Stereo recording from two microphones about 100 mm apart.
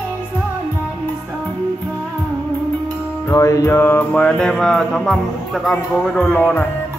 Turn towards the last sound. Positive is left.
turn(degrees=15)  # may be behind; listen again after turning